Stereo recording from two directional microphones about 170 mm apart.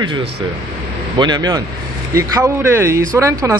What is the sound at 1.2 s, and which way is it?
A man's voice, 25° right (ahead or behind).